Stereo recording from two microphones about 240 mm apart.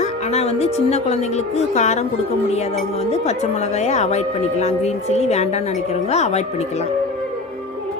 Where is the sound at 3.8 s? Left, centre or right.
Left.